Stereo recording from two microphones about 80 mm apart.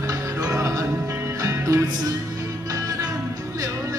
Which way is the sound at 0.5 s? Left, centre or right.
Right.